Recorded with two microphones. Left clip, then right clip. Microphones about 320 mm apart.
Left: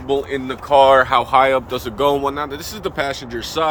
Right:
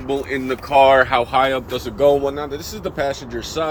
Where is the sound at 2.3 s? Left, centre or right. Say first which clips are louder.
Left 2 dB; centre.